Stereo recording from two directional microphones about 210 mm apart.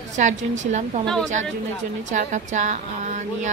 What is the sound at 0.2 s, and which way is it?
Speech, 35° right (ahead or behind).